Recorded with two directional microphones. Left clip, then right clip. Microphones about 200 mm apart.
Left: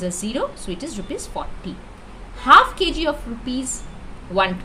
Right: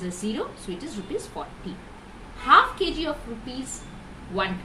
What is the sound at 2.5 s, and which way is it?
Speech, 60° left (ahead or behind).